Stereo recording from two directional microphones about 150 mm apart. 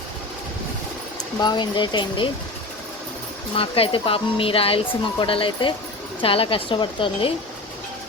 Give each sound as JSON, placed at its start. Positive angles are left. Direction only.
{"t": 1.4, "sound": "speech", "side_deg": 30}
{"t": 3.5, "sound": "speech", "side_deg": 40}